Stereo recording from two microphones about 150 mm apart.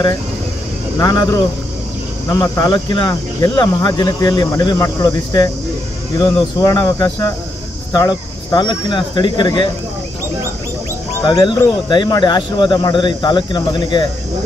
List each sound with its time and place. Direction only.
0.9 s speech: 25° left (ahead or behind)
11.2 s speech: 25° left (ahead or behind)